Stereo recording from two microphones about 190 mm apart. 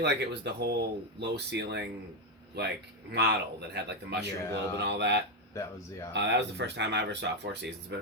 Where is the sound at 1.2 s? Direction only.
60° right (ahead or behind).